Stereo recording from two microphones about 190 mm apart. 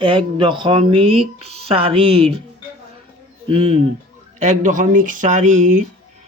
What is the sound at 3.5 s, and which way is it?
Speech, 30° right (ahead or behind).